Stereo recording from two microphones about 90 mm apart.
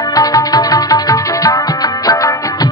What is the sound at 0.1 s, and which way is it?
Music, 45° left (ahead or behind).